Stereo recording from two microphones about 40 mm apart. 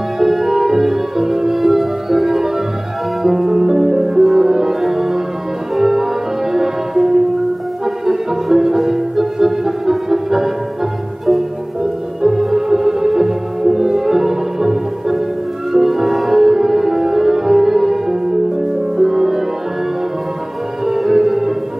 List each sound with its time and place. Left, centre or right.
0.2 s music: centre
12.2 s music: centre
20.8 s music: centre